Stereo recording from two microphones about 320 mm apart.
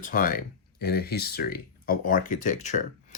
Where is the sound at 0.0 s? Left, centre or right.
Left.